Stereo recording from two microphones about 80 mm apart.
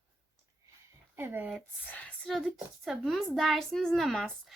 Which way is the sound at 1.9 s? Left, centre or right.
Centre.